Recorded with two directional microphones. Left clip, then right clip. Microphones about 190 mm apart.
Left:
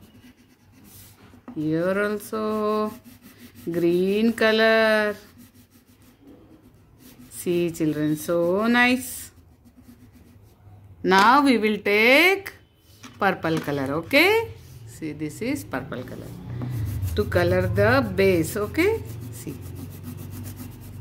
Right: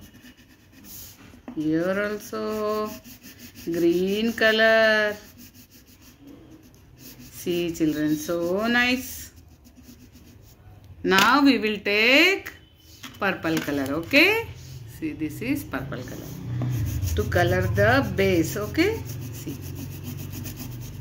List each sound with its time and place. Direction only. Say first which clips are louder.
1.6 s speech: left 1 dB; 60° left (ahead or behind)
7.3 s speech: left 2 dB; 65° left (ahead or behind)
11.0 s speech: left 2 dB; 60° left (ahead or behind)
17.1 s speech: left 1 dB; 65° left (ahead or behind)